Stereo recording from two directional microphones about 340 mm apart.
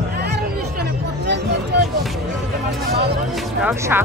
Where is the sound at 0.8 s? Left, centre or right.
Right.